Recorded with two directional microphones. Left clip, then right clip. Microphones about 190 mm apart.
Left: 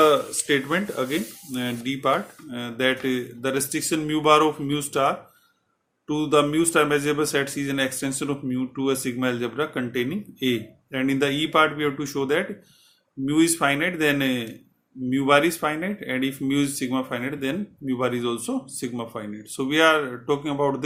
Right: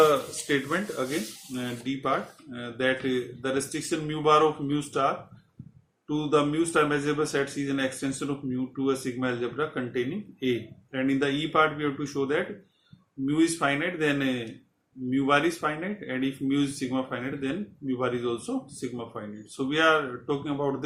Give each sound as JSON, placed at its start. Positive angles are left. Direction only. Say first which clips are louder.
{"t": 0.0, "sound": "speech", "louder": "left 3 dB", "side_deg": 45}